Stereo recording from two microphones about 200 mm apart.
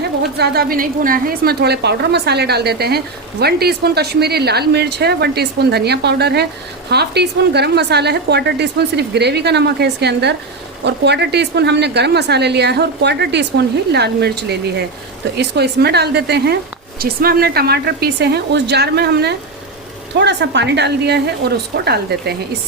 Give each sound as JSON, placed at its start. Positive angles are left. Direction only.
{"t": 0.3, "sound": "a woman's voice", "side_deg": -55}